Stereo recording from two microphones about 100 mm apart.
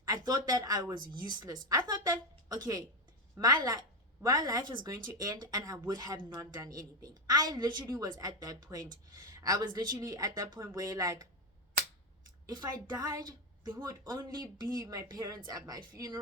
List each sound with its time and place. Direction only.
0.0 s speech: 40° right (ahead or behind)
12.5 s speech: 40° right (ahead or behind)